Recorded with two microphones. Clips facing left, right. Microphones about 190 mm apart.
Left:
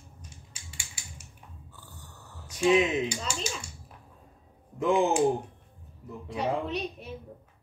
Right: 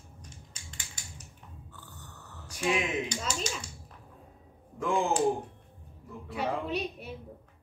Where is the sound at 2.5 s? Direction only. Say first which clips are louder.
Left 7 dB; 20° left (ahead or behind).